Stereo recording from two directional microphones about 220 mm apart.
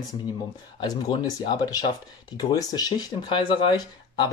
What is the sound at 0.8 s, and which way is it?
Speech, 15° left (ahead or behind).